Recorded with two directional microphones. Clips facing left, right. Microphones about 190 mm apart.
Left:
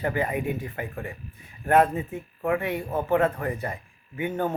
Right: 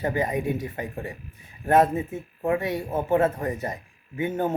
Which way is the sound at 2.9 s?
15° right (ahead or behind).